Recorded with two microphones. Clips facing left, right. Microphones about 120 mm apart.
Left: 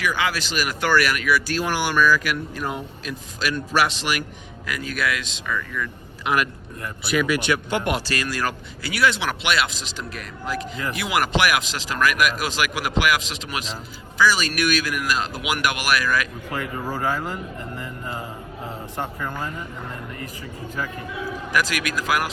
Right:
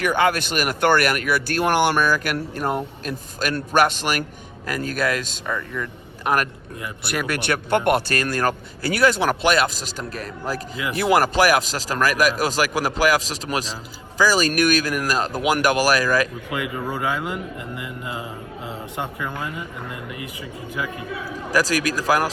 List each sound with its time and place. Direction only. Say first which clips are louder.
0.0 s speech: right 5 dB; 50° right (ahead or behind)
7.0 s speech: left 4 dB; 55° right (ahead or behind); by 16.3 s 40° right (ahead or behind)
16.9 s a man's voice: left 1 dB; 15° right (ahead or behind)
21.5 s speech: right 4 dB; 35° right (ahead or behind)